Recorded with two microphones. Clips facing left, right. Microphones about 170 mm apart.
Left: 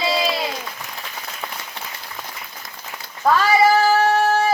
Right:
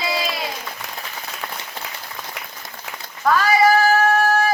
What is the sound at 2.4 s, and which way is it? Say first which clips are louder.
Applause: right 3 dB; 70° right (ahead or behind).